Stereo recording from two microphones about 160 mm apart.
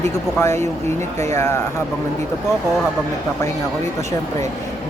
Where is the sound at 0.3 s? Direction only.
15° left (ahead or behind).